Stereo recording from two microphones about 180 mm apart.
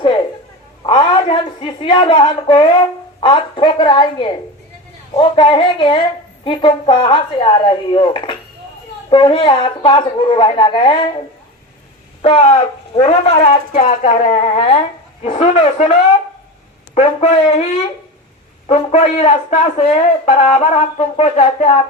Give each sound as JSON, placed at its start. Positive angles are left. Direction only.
{"t": 0.9, "sound": "a woman's voice", "side_deg": 30}
{"t": 12.2, "sound": "speech", "side_deg": 35}
{"t": 18.7, "sound": "speech", "side_deg": 40}